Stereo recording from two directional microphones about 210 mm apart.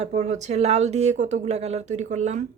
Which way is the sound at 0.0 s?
35° right (ahead or behind).